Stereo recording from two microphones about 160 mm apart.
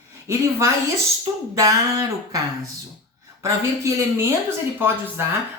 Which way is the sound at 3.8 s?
20° right (ahead or behind).